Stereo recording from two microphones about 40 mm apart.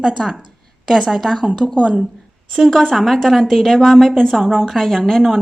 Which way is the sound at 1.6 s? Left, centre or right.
Centre.